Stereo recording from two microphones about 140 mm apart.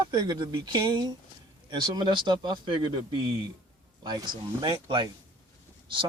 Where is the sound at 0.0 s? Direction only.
35° right (ahead or behind).